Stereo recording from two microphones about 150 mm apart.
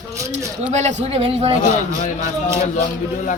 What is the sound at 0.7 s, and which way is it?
Speech, 50° right (ahead or behind).